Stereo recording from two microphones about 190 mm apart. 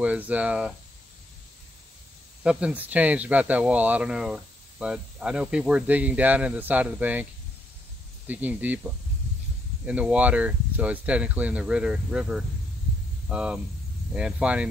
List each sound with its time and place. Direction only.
0.0 s speech: 10° right (ahead or behind)
2.4 s speech: 5° right (ahead or behind)
8.3 s speech: 10° right (ahead or behind)
9.8 s speech: 5° right (ahead or behind)